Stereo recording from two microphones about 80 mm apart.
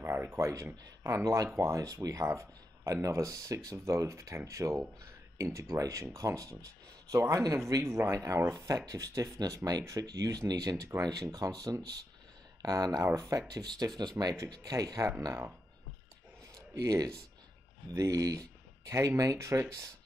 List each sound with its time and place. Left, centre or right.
0.0 s speech: right
13.5 s speech: right
14.4 s speech: right
16.5 s a sound: right
17.9 s speech: right